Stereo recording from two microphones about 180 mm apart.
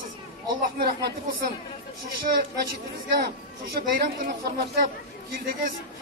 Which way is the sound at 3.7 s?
55° right (ahead or behind).